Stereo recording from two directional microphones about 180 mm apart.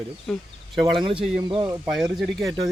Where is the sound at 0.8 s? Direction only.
30° right (ahead or behind).